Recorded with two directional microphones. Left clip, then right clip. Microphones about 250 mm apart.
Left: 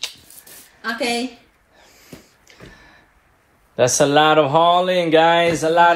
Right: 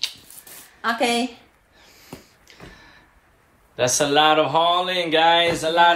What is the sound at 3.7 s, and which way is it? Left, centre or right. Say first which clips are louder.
Speech: left 4 dB; centre.